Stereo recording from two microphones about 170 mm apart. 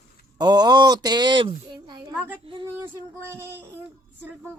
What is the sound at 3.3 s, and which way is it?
Child singing, 15° right (ahead or behind).